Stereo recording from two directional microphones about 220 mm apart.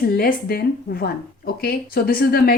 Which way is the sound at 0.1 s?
45° left (ahead or behind).